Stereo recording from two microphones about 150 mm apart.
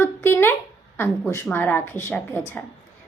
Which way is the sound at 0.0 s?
15° left (ahead or behind).